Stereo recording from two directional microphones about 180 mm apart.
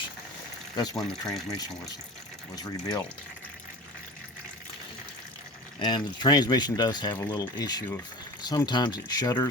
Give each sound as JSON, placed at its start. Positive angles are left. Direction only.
{"t": 0.8, "sound": "speech", "side_deg": 20}
{"t": 2.6, "sound": "speech", "side_deg": 20}
{"t": 5.8, "sound": "speech", "side_deg": 25}